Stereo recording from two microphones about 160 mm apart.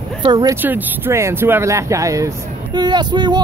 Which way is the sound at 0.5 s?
10° right (ahead or behind).